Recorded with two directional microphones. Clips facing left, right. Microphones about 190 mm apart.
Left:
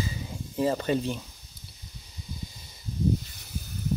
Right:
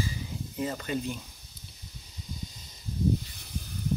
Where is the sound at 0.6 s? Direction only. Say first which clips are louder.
Left 6 dB; 35° left (ahead or behind).